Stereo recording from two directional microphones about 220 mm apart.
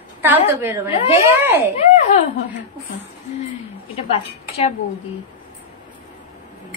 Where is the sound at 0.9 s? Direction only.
25° left (ahead or behind).